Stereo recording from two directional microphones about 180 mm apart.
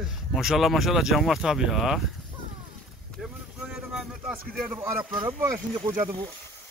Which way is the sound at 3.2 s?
Centre (ahead or behind).